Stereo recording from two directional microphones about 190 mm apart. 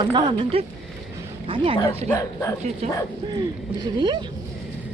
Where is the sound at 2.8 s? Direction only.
35° right (ahead or behind).